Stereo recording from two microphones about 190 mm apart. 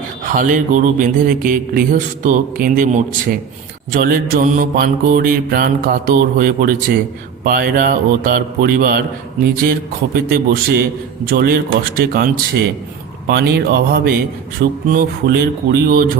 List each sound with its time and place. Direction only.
0.3 s mantra: 45° right (ahead or behind)
10.2 s mantra: 50° right (ahead or behind)
13.2 s speech: 60° right (ahead or behind)
14.6 s mantra: 50° right (ahead or behind)